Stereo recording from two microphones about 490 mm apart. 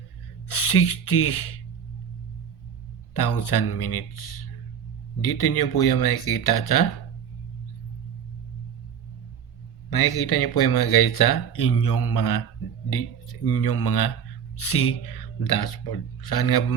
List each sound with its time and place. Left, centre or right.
0.4 s speech: left
3.2 s speech: left
9.9 s speech: left
13.5 s speech: left